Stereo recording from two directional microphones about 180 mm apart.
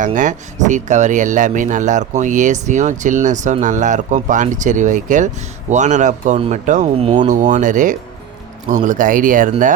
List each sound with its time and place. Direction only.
0.0 s speech: 45° right (ahead or behind); by 7.3 s 30° right (ahead or behind)
7.3 s speech: 45° right (ahead or behind)